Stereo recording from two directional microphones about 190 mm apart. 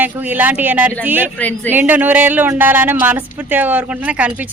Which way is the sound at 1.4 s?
10° left (ahead or behind).